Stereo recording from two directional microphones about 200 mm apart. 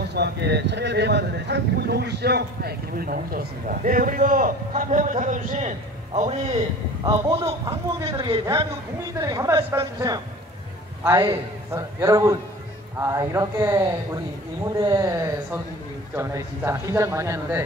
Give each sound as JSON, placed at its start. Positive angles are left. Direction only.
{"t": 0.0, "sound": "speech", "side_deg": -55}
{"t": 7.1, "sound": "speech", "side_deg": -15}